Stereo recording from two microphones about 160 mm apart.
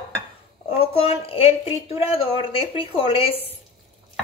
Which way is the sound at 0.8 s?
35° left (ahead or behind).